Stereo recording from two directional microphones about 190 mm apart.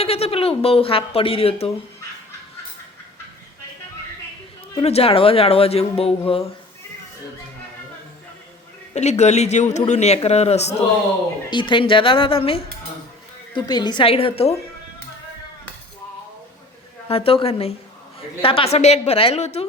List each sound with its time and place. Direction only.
0.0 s speech: 30° left (ahead or behind)
4.8 s speech: 30° left (ahead or behind)
9.0 s speech: 35° left (ahead or behind)
17.1 s speech: 30° left (ahead or behind)